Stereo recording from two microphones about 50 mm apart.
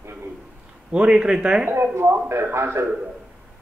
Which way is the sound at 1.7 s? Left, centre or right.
Right.